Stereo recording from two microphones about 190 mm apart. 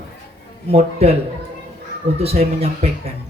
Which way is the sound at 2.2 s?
35° right (ahead or behind).